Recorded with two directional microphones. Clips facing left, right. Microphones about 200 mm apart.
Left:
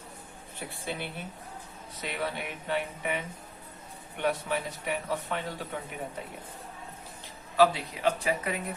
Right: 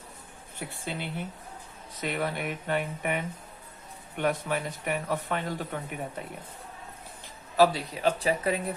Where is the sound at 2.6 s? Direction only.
50° right (ahead or behind).